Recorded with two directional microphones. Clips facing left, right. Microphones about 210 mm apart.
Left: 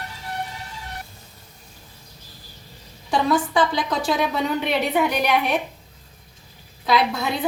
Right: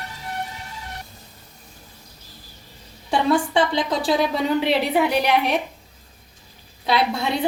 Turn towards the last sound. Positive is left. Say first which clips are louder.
# even
turn(degrees=-30)  # may be behind; listen again after turning